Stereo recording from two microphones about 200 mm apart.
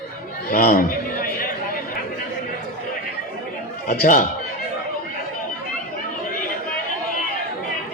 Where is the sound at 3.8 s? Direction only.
45° left (ahead or behind).